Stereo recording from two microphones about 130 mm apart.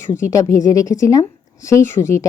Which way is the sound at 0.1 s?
25° left (ahead or behind).